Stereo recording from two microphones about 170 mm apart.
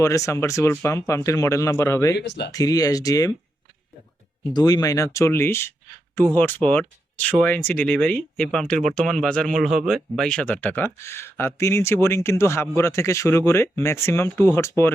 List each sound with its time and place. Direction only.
0.0 s speech: 20° left (ahead or behind)
2.1 s speech: 90° left
2.5 s speech: 20° left (ahead or behind)
4.5 s speech: 20° left (ahead or behind)